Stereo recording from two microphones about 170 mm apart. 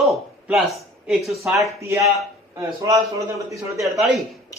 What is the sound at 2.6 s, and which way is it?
A man's voice, 20° right (ahead or behind).